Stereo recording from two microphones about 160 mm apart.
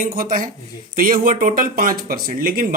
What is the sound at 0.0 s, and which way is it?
Speech, 60° right (ahead or behind).